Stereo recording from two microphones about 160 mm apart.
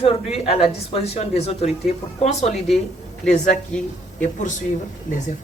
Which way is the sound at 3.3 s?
45° left (ahead or behind).